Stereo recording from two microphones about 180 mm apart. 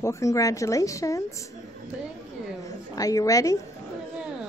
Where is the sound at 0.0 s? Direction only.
15° left (ahead or behind).